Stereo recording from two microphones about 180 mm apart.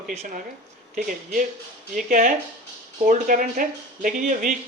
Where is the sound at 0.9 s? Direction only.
50° right (ahead or behind).